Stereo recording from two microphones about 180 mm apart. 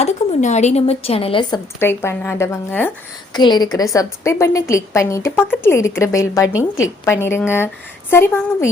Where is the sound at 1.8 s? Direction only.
15° left (ahead or behind).